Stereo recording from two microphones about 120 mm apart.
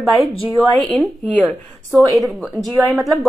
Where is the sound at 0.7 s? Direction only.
10° left (ahead or behind).